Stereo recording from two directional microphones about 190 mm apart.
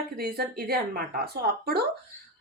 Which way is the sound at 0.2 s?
55° right (ahead or behind).